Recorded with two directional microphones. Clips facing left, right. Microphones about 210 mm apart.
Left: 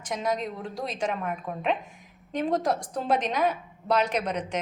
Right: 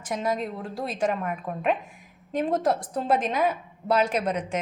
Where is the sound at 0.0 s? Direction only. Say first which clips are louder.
Right 1 dB; 5° right (ahead or behind).